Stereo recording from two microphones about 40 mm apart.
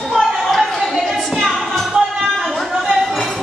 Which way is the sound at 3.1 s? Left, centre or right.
Centre.